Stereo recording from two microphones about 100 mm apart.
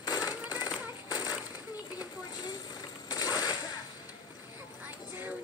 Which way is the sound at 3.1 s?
40° left (ahead or behind).